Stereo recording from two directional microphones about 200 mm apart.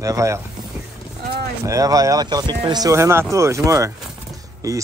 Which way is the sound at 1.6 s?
15° right (ahead or behind).